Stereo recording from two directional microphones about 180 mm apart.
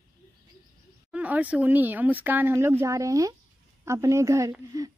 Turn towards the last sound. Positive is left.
turn(degrees=-20)  # may be behind; listen again after turning